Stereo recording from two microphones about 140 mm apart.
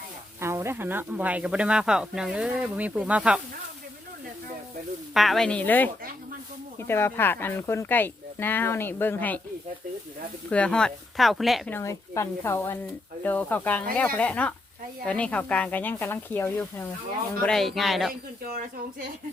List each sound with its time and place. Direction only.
0.3 s speech: 20° right (ahead or behind)
5.1 s speech: centre (ahead or behind)
10.5 s speech: 5° left (ahead or behind)
11.7 s speech: 20° left (ahead or behind)
17.4 s speech: centre (ahead or behind)